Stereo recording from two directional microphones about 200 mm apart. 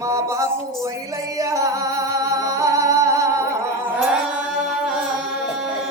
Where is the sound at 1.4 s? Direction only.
15° right (ahead or behind).